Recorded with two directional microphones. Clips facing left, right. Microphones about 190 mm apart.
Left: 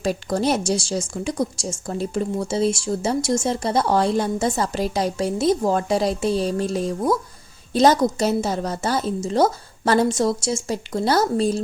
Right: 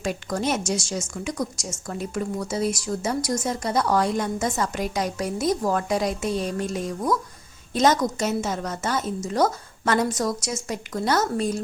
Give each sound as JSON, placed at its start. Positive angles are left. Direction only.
{"t": 0.0, "sound": "a woman's voice", "side_deg": 35}